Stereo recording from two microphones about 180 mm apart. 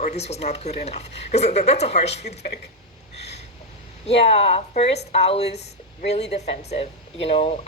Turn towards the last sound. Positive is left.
turn(degrees=35)  # may be behind; listen again after turning